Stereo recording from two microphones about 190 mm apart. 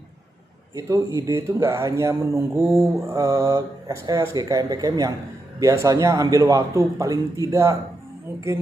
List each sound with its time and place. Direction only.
0.8 s speech: 15° right (ahead or behind)